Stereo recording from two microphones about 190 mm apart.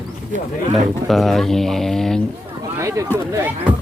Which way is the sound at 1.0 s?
Centre (ahead or behind).